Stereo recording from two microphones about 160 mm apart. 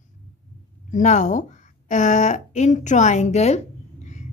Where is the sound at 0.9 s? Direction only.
50° left (ahead or behind).